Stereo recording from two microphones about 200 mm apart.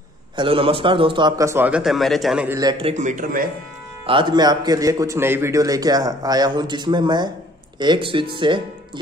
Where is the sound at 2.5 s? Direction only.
25° right (ahead or behind); by 3.5 s 45° right (ahead or behind).